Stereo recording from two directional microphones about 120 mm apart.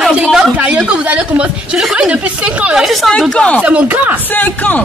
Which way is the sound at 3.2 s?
10° left (ahead or behind).